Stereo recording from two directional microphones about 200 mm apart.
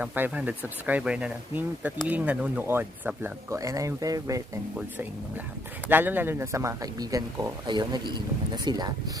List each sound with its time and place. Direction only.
0.0 s speech: 5° right (ahead or behind)
5.9 s speech: 10° right (ahead or behind)